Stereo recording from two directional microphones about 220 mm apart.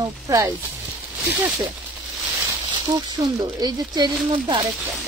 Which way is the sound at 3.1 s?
15° right (ahead or behind).